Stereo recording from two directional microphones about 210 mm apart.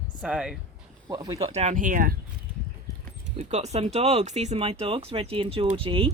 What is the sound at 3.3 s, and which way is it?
Speech, 30° right (ahead or behind).